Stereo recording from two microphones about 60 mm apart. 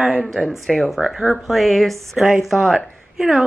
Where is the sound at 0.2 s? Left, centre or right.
Centre.